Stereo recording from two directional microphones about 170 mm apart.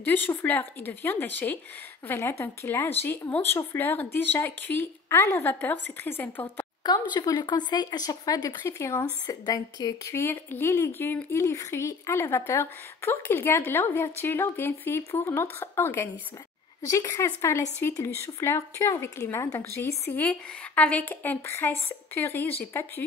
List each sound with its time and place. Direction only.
0.0 s speech: 10° left (ahead or behind)